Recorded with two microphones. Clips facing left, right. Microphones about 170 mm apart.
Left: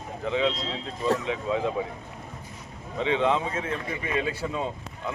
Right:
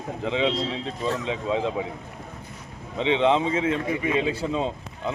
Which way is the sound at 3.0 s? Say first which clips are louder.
Right 4 dB; 25° right (ahead or behind).